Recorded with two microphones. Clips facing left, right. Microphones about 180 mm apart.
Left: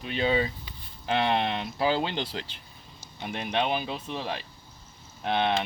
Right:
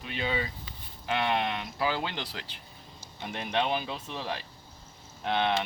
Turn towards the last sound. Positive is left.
turn(degrees=20)  # may be behind; listen again after turning